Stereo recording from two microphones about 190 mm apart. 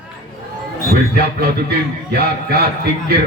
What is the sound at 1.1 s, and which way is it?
Speech, 55° right (ahead or behind).